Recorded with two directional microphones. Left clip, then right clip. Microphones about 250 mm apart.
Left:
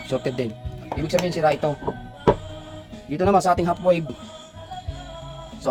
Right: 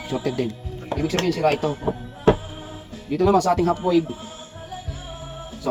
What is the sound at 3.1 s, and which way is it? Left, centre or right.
Speech, centre.